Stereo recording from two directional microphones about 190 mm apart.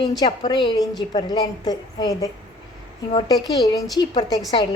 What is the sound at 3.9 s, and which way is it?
Speech, 20° left (ahead or behind).